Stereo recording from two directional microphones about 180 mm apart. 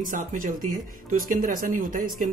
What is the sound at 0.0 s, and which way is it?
Speech, 50° right (ahead or behind).